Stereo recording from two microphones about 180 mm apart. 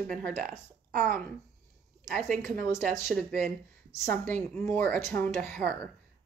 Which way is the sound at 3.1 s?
5° left (ahead or behind).